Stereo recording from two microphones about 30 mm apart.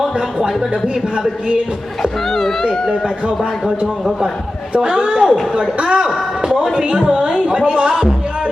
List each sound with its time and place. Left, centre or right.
0.2 s speech: right
2.0 s speech: centre
4.8 s speech: right
7.3 s speech: right